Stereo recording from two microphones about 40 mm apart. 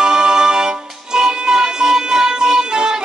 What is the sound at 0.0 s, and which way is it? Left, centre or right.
Music, centre.